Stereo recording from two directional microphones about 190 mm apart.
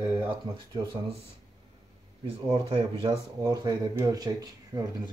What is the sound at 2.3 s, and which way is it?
Speech, 30° right (ahead or behind).